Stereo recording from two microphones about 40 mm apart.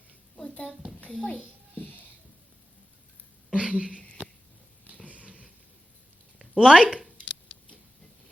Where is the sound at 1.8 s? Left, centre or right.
Left.